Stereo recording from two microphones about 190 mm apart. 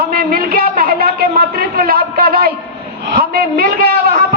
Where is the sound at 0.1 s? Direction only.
50° right (ahead or behind).